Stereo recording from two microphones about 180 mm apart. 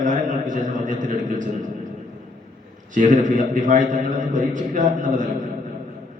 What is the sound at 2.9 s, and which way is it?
A man's voice, 45° right (ahead or behind).